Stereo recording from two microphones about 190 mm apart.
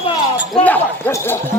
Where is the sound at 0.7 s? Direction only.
10° left (ahead or behind).